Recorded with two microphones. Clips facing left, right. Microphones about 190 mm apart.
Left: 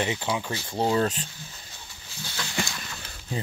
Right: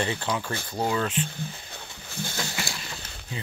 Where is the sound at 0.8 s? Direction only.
25° left (ahead or behind).